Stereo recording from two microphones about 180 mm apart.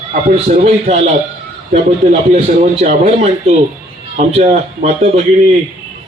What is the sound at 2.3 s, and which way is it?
A man's voice, 35° right (ahead or behind).